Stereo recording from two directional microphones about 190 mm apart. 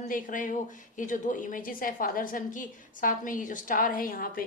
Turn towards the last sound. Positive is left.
turn(degrees=50)  # may be behind; listen again after turning